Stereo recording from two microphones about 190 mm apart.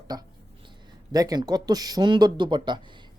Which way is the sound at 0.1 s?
20° right (ahead or behind).